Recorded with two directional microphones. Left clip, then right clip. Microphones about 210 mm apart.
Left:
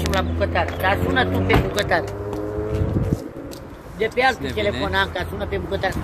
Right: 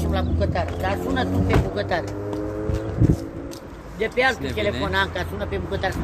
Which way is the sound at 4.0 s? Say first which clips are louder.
Left 2 dB; centre (ahead or behind).